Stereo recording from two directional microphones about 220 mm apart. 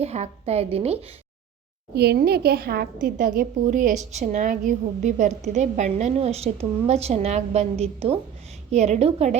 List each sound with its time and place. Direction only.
0.0 s a woman's voice: 30° right (ahead or behind)
2.0 s a woman's voice: 45° right (ahead or behind); by 9.4 s 30° right (ahead or behind)